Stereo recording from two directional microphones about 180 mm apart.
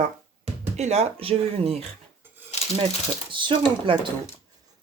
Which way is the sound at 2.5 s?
35° left (ahead or behind).